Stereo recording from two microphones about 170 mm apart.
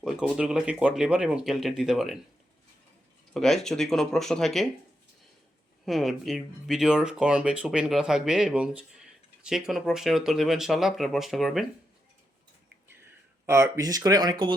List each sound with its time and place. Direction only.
0.0 s speech: 5° right (ahead or behind)
3.3 s speech: centre (ahead or behind)
5.8 s speech: centre (ahead or behind)
13.4 s speech: 15° right (ahead or behind)